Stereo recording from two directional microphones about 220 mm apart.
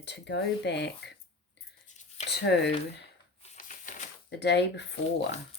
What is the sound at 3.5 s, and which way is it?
Typewriter, 35° left (ahead or behind).